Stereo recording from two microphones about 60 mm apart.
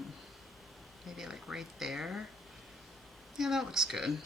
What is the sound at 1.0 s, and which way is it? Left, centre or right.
Speech, centre.